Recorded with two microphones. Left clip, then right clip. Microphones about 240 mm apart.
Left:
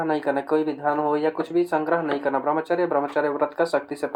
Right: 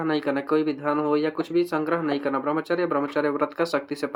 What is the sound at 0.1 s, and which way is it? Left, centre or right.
Speech, right.